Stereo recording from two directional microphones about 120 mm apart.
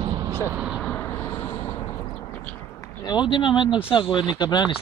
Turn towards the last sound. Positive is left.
turn(degrees=35)  # may be behind; listen again after turning